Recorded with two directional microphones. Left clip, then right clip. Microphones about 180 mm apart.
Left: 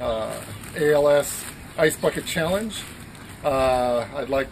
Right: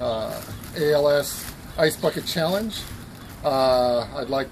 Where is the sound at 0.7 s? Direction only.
5° right (ahead or behind).